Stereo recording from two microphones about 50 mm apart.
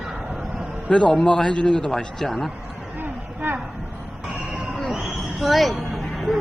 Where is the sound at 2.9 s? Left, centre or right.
Right.